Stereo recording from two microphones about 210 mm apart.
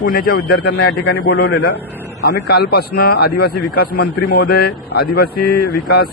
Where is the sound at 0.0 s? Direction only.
40° left (ahead or behind).